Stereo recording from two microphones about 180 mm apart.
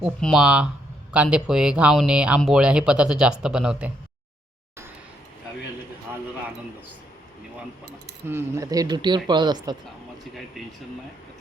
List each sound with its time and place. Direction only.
0.0 s speech: centre (ahead or behind)
8.3 s speech: 15° right (ahead or behind)